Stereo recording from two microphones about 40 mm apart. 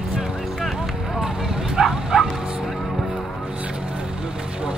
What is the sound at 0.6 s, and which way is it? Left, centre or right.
Run, centre.